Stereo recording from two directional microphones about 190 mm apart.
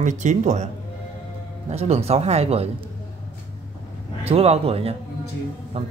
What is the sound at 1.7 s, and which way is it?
Speech, 35° right (ahead or behind).